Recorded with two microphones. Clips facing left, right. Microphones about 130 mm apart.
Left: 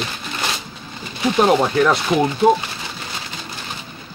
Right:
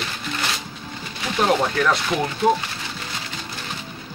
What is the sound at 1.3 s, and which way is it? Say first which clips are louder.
Speech: left 4 dB; 20° left (ahead or behind).